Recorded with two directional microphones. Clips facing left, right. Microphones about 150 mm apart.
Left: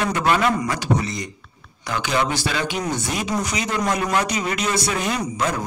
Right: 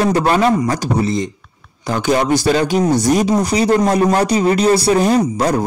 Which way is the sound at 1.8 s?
40° right (ahead or behind).